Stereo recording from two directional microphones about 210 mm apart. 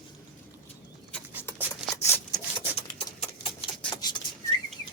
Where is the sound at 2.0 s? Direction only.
10° left (ahead or behind).